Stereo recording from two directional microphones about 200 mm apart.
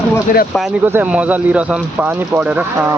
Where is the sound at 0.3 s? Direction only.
45° left (ahead or behind).